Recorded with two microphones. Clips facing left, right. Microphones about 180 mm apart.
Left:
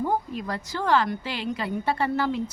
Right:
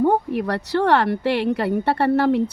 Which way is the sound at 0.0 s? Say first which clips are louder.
Right 8 dB; 65° right (ahead or behind).